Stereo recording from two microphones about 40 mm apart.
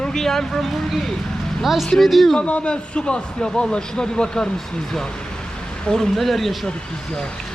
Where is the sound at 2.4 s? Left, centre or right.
Left.